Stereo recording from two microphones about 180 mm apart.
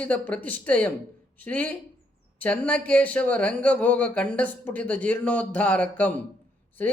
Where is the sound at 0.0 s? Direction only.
10° left (ahead or behind).